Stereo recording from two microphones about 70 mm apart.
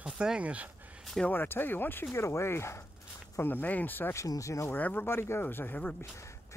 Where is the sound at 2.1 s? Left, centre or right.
Left.